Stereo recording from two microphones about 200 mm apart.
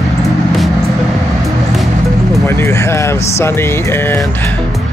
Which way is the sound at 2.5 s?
15° left (ahead or behind).